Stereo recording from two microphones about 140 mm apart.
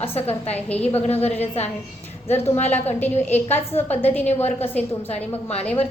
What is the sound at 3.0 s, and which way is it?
A woman's voice, 15° left (ahead or behind).